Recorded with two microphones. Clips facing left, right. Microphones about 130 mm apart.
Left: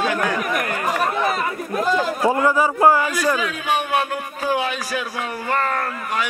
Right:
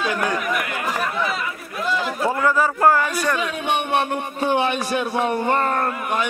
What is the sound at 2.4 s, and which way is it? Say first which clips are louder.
Speech: even; 10° left (ahead or behind).